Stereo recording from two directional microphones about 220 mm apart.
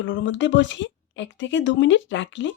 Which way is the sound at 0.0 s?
55° left (ahead or behind).